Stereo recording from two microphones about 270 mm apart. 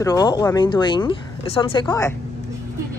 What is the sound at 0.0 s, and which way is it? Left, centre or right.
Speech, centre.